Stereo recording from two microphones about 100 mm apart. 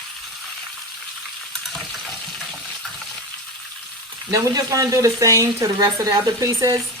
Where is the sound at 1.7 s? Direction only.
Centre (ahead or behind).